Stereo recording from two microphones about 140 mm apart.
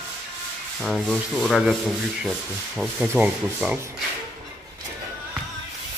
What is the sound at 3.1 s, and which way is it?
Speech, 10° right (ahead or behind).